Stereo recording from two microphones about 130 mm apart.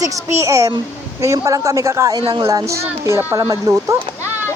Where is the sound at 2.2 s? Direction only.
35° right (ahead or behind).